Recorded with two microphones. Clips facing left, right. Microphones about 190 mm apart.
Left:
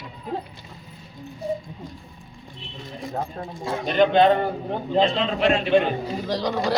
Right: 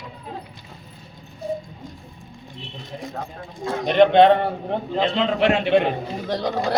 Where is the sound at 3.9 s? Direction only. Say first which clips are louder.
Right 4 dB; 70° right (ahead or behind).